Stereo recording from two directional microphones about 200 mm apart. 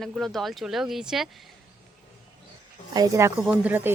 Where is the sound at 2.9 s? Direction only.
20° right (ahead or behind).